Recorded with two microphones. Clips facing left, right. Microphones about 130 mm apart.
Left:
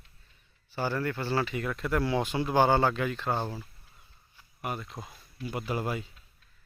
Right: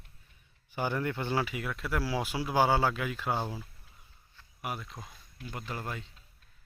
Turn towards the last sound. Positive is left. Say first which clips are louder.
# left 7 dB
turn(degrees=10)  # may be behind; listen again after turning